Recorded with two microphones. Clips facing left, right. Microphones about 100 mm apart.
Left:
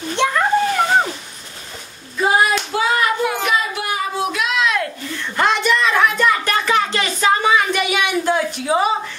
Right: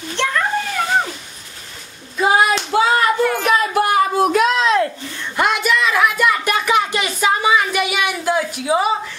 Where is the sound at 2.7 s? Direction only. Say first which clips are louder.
Right 7 dB; 30° right (ahead or behind).